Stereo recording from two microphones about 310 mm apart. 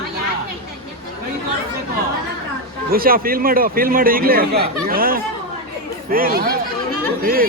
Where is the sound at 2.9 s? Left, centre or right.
Right.